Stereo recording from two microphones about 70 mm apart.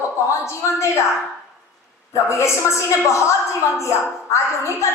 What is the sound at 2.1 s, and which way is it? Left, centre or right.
A woman's voice, left.